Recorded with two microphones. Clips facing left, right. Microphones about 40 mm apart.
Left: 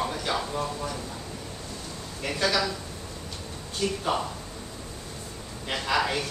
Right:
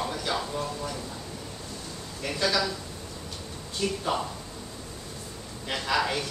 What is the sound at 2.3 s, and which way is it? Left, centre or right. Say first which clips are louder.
Speech: left 1 dB; centre.